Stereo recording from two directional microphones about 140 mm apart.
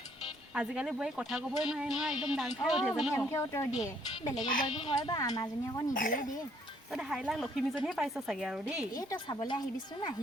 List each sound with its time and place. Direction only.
0.5 s speech: 5° right (ahead or behind)
3.2 s speech: 20° left (ahead or behind)
4.6 s speech: 35° left (ahead or behind)
5.9 s speech: 75° left (ahead or behind)
6.9 s speech: centre (ahead or behind)
9.0 s speech: 30° left (ahead or behind)